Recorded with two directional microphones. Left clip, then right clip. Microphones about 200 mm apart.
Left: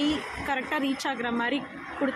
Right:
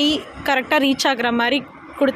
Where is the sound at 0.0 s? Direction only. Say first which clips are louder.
Right 8 dB; 55° right (ahead or behind).